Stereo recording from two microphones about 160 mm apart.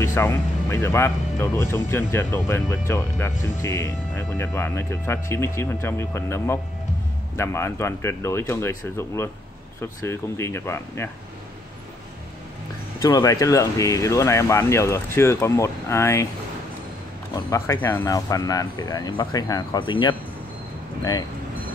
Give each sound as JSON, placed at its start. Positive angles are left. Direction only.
{"t": 0.0, "sound": "speech", "side_deg": 15}
{"t": 13.0, "sound": "speech", "side_deg": 20}
{"t": 17.5, "sound": "speech", "side_deg": 20}